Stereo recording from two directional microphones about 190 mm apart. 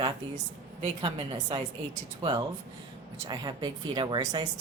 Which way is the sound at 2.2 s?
25° right (ahead or behind).